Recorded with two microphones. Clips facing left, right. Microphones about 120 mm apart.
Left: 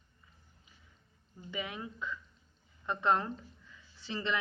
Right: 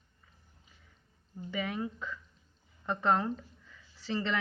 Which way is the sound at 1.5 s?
40° right (ahead or behind).